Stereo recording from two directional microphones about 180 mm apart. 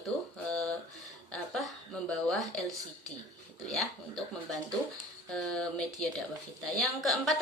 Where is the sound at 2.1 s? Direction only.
5° left (ahead or behind).